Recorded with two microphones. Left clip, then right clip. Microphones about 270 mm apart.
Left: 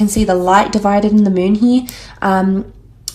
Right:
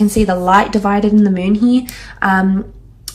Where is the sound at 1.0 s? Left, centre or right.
Centre.